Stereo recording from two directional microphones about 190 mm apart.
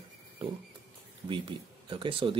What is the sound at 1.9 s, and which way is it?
Speech, 30° right (ahead or behind).